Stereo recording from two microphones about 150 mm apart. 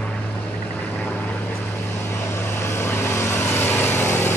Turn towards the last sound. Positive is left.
turn(degrees=15)  # may be behind; listen again after turning